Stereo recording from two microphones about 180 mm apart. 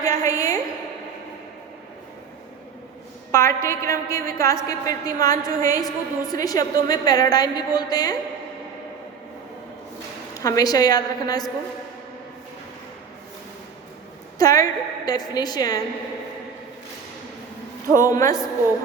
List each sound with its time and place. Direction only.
0.0 s a woman's voice: 20° left (ahead or behind)
3.3 s a woman's voice: 15° left (ahead or behind)
10.3 s a woman's voice: 20° left (ahead or behind)
14.3 s a woman's voice: 20° left (ahead or behind)
18.0 s a woman's voice: 20° left (ahead or behind)